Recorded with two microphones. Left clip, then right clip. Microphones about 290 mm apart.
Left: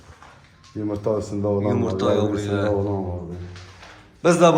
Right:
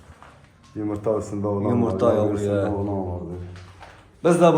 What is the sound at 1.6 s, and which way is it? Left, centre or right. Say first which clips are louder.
A man's voice: right 5 dB; centre.